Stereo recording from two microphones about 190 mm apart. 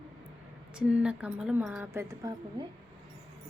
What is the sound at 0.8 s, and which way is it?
Speech, 5° right (ahead or behind).